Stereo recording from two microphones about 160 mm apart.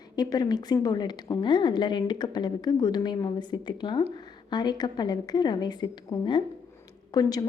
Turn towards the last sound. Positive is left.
turn(degrees=25)  # may be behind; listen again after turning